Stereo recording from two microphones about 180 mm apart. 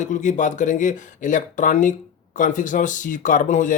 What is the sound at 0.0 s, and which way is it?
Speech, 45° left (ahead or behind).